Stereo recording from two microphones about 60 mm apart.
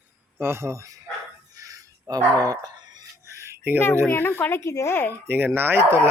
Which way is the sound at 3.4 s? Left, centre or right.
Right.